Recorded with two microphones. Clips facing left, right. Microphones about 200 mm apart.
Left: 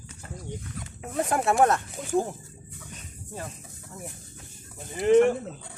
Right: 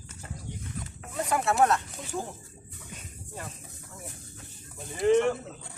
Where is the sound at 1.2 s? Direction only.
50° left (ahead or behind).